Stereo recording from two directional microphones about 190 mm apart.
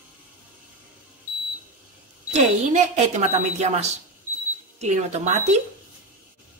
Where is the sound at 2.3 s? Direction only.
40° right (ahead or behind).